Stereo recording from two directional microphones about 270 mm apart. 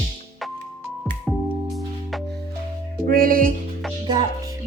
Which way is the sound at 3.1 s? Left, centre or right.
Right.